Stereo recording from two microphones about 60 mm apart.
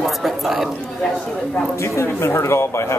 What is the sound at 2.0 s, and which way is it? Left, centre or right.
Speech, left.